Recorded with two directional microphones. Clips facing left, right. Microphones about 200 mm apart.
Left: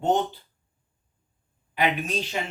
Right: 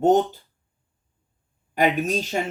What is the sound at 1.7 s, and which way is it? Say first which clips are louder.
Speech: right 5 dB; 45° right (ahead or behind).